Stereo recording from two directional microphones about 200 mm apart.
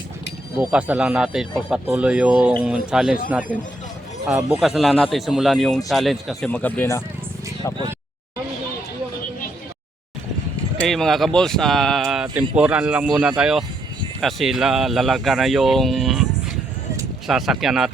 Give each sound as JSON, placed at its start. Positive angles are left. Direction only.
{"t": 0.6, "sound": "speech", "side_deg": -5}
{"t": 4.6, "sound": "speech", "side_deg": 0}
{"t": 10.8, "sound": "speech", "side_deg": 0}
{"t": 17.2, "sound": "speech", "side_deg": 0}